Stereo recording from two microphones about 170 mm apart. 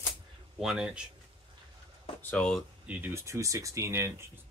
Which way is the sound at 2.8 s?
15° right (ahead or behind).